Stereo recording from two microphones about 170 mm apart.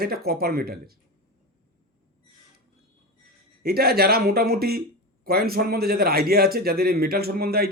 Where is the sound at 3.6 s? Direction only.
65° right (ahead or behind).